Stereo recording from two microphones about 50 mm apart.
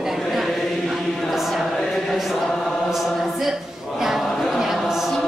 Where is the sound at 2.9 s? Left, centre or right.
Centre.